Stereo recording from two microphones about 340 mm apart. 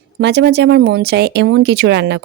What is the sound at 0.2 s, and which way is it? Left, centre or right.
Speech, right.